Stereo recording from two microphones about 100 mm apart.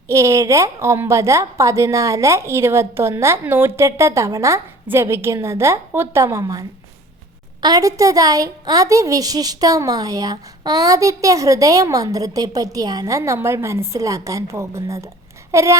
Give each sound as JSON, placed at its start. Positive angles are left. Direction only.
{"t": 0.1, "sound": "a woman's voice", "side_deg": -30}